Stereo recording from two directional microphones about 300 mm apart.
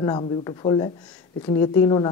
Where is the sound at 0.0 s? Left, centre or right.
Centre.